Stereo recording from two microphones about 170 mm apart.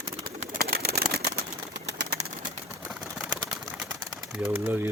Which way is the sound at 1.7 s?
80° right.